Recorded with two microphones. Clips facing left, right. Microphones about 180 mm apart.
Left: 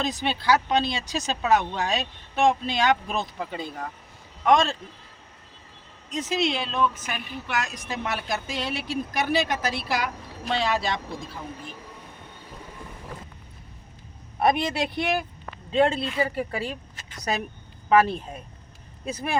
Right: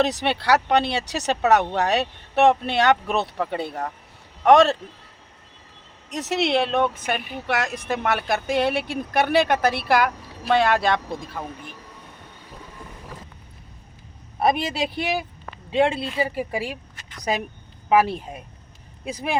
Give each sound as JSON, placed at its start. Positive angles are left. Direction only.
{"t": 0.0, "sound": "speech", "side_deg": -75}
{"t": 6.1, "sound": "speech", "side_deg": -70}
{"t": 14.3, "sound": "a woman's voice", "side_deg": -5}
{"t": 17.8, "sound": "a woman's voice", "side_deg": -10}